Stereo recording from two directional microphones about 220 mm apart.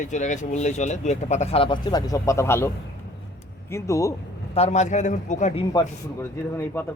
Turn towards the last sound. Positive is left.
turn(degrees=10)  # may be behind; listen again after turning